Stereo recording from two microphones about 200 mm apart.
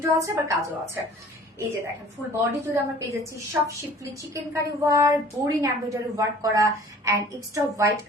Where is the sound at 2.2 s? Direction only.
Centre (ahead or behind).